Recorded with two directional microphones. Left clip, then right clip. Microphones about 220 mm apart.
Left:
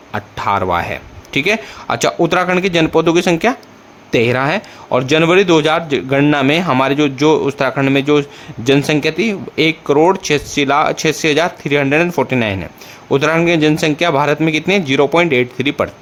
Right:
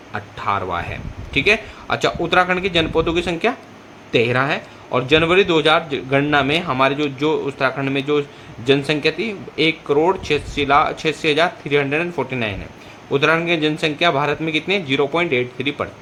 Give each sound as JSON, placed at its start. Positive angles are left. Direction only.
{"t": 0.1, "sound": "speech", "side_deg": 50}